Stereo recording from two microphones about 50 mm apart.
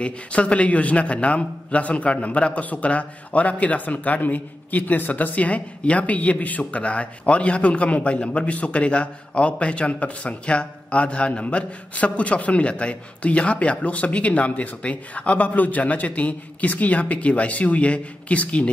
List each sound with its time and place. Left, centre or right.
0.0 s a man's voice: left